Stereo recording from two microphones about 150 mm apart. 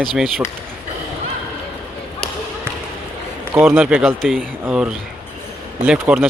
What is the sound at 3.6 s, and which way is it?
Speech, 15° right (ahead or behind).